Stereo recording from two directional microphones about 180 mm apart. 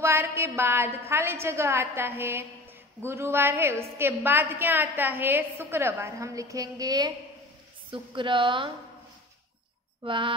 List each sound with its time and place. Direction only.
0.0 s a woman's voice: 15° right (ahead or behind)
10.0 s a woman's voice: 30° right (ahead or behind)